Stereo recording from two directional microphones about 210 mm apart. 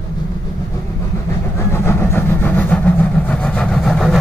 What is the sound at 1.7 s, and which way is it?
Vehicle, 10° left (ahead or behind).